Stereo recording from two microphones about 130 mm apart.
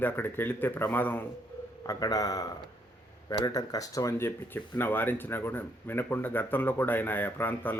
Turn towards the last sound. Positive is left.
turn(degrees=15)  # may be behind; listen again after turning